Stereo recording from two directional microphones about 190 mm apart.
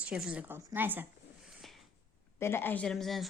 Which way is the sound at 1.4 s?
Centre (ahead or behind).